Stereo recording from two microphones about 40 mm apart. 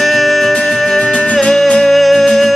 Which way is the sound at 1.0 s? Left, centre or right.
Left.